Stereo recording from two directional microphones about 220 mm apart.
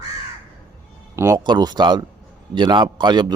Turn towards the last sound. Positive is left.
turn(degrees=-20)  # may be behind; listen again after turning